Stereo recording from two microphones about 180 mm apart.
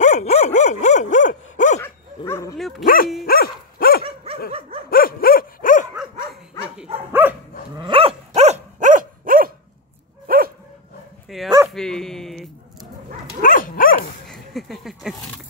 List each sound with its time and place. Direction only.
0.0 s dog: 40° left (ahead or behind)
1.8 s dog: 15° left (ahead or behind)
2.8 s speech: 50° left (ahead or behind)
3.3 s dog: 55° left (ahead or behind)
4.0 s dog: 30° right (ahead or behind)
4.8 s dog: 55° left (ahead or behind)
7.1 s dog: 10° right (ahead or behind)
7.7 s dog: 25° right (ahead or behind); by 10.5 s 55° right (ahead or behind)
11.2 s dog: centre (ahead or behind)
13.4 s dog: 50° left (ahead or behind)
14.2 s a sound: centre (ahead or behind)